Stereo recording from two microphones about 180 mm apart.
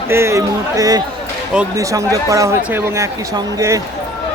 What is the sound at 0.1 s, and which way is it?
Speech, 15° right (ahead or behind).